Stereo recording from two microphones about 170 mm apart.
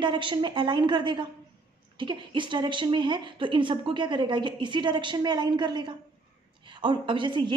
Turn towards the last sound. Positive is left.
turn(degrees=-30)  # may be behind; listen again after turning